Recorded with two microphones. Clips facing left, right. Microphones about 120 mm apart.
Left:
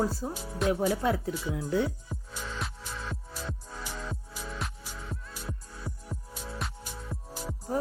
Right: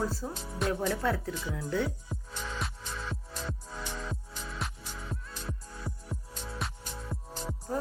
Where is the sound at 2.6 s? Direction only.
Centre (ahead or behind).